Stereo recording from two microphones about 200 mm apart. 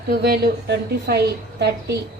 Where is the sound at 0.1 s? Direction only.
50° right (ahead or behind).